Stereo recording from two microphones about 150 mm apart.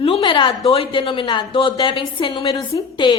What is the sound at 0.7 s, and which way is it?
A woman's voice, 40° left (ahead or behind).